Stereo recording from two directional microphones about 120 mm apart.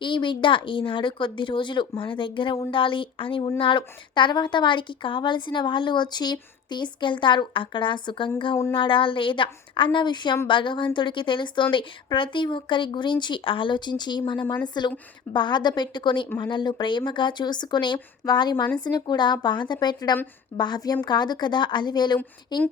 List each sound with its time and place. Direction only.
0.0 s a woman's voice: 40° left (ahead or behind)